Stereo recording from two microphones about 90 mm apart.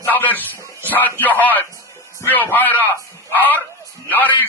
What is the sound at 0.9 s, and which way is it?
Speech, 20° left (ahead or behind).